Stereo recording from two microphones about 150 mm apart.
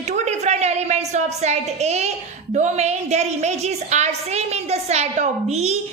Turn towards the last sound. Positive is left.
turn(degrees=-45)  # may be behind; listen again after turning